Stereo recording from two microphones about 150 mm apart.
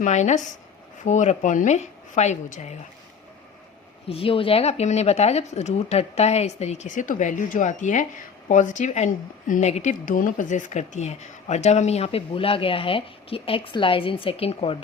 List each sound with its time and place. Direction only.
0.0 s speech: 50° left (ahead or behind)
4.1 s speech: 35° left (ahead or behind)